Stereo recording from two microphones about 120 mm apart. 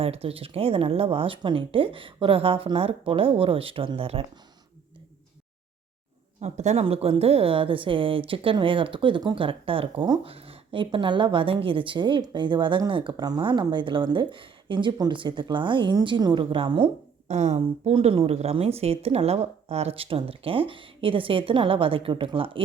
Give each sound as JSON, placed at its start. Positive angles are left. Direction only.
{"t": 0.0, "sound": "a woman's voice", "side_deg": -55}
{"t": 6.4, "sound": "speech", "side_deg": -70}
{"t": 6.8, "sound": "a woman's voice", "side_deg": -55}
{"t": 17.2, "sound": "speech", "side_deg": -70}
{"t": 17.9, "sound": "a woman's voice", "side_deg": -50}